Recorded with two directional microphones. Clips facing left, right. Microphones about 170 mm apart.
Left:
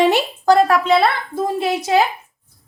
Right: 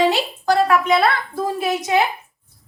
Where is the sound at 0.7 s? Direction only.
30° left (ahead or behind).